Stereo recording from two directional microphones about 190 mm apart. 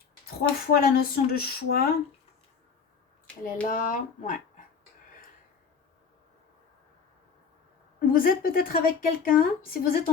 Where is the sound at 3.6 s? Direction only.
45° left (ahead or behind).